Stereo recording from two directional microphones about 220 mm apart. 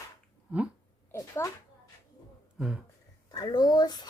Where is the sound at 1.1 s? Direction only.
10° left (ahead or behind).